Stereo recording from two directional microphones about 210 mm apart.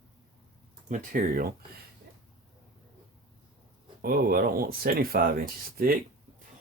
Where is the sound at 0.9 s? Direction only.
40° right (ahead or behind).